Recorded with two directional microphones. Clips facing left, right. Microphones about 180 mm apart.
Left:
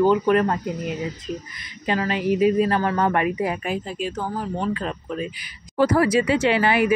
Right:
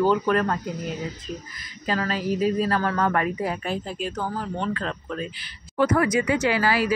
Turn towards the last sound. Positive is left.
turn(degrees=20)  # may be behind; listen again after turning